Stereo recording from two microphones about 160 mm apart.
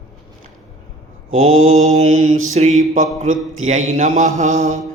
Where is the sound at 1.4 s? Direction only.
55° right (ahead or behind).